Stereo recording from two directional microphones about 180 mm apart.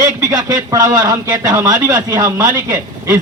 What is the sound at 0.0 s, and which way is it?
A man's voice, 20° right (ahead or behind).